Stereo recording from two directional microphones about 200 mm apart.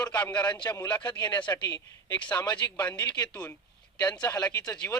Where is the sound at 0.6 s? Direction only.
20° left (ahead or behind).